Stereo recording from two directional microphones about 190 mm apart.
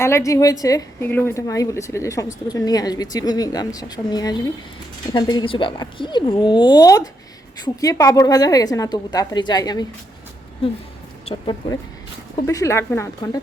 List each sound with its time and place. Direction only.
0.0 s a woman's voice: 15° left (ahead or behind)
11.3 s a woman's voice: 25° left (ahead or behind)